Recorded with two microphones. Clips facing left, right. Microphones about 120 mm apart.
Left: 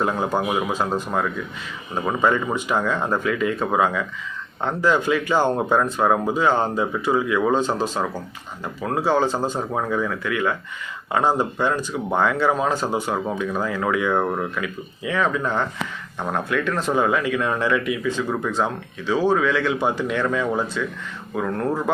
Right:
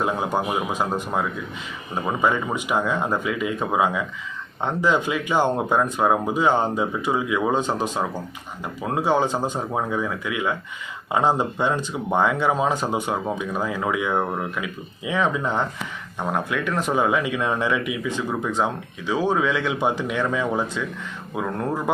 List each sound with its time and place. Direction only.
0.0 s speech: 15° right (ahead or behind)
2.2 s speech: 10° right (ahead or behind)
14.6 s speech: 15° right (ahead or behind)